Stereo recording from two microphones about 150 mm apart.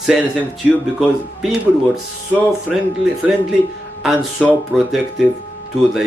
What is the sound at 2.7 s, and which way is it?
Speech, centre (ahead or behind).